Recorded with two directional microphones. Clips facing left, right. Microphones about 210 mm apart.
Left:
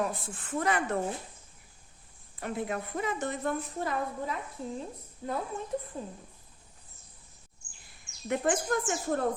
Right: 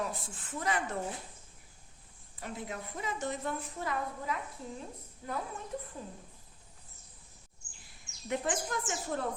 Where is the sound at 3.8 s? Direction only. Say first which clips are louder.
Left 4 dB; 35° left (ahead or behind).